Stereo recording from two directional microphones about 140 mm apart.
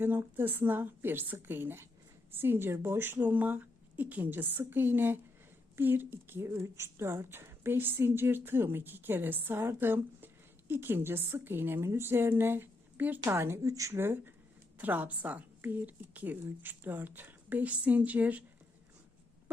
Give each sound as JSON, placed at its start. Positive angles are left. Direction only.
{"t": 0.0, "sound": "a woman's voice", "side_deg": -15}